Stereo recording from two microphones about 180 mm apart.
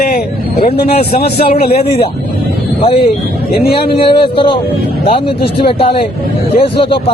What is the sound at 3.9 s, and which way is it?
A man's voice, 30° left (ahead or behind).